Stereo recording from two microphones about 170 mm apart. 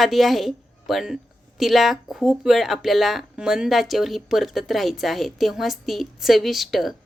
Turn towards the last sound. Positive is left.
turn(degrees=0)  # may be behind; listen again after turning